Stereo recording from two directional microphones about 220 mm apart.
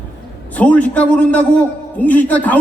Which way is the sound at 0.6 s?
5° left (ahead or behind).